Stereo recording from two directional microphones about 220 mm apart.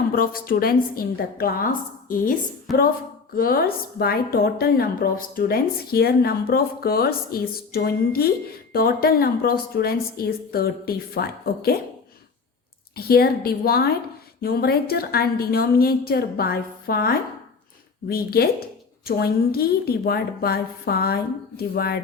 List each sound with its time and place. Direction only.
0.1 s a woman's voice: 40° left (ahead or behind)
2.7 s speech: centre (ahead or behind)
3.3 s a woman's voice: 40° left (ahead or behind)
13.0 s a woman's voice: 45° left (ahead or behind)